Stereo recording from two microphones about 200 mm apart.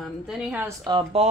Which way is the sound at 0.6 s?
20° right (ahead or behind).